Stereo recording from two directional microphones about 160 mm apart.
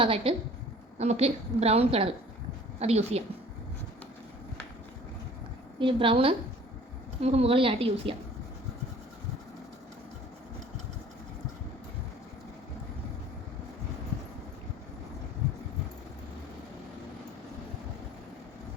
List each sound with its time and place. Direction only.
0.0 s a woman's voice: 35° right (ahead or behind)
5.8 s a woman's voice: 30° right (ahead or behind)